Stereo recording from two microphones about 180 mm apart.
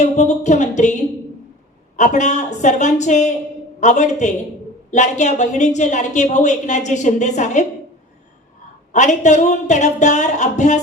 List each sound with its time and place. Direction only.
0.0 s speech: 40° left (ahead or behind)
2.0 s a woman's voice: 40° left (ahead or behind)
8.9 s a woman's voice: 40° left (ahead or behind)